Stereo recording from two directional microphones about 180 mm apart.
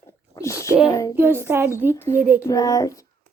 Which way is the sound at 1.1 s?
10° right (ahead or behind).